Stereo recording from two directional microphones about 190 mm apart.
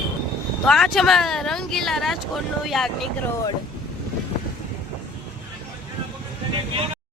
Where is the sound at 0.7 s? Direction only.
Centre (ahead or behind).